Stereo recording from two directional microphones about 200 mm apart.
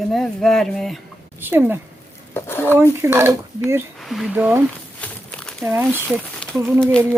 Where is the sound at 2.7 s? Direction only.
10° right (ahead or behind).